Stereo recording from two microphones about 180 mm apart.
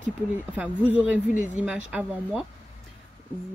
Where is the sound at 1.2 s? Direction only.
45° left (ahead or behind).